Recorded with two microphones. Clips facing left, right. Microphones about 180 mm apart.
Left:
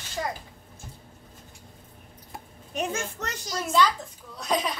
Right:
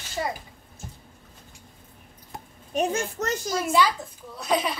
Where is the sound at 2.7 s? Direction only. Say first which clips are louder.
Right 5 dB; 40° right (ahead or behind).